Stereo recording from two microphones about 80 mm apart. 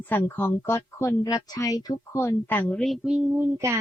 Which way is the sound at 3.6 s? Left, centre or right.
Right.